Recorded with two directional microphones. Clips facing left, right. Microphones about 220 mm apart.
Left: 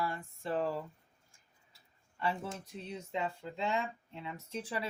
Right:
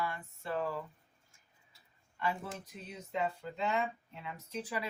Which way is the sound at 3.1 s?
30° left (ahead or behind).